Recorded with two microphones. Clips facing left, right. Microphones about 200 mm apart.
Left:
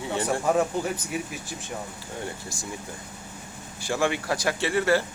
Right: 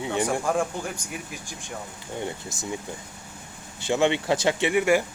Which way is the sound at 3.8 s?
20° right (ahead or behind).